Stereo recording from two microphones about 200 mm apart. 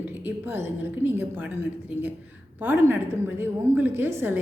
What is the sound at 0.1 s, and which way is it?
A woman's voice, 10° right (ahead or behind).